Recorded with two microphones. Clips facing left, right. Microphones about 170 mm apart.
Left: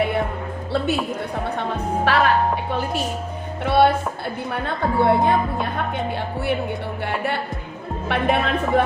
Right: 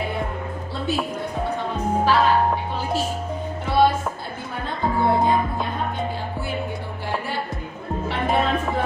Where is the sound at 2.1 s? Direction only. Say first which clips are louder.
Even; 65° left (ahead or behind).